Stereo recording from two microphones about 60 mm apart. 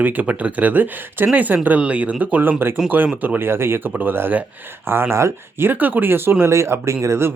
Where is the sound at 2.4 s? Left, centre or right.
Right.